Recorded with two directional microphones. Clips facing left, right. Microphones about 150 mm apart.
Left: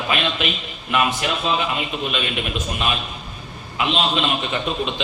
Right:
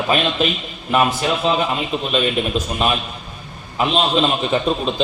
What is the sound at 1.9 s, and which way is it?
Speech, 35° right (ahead or behind).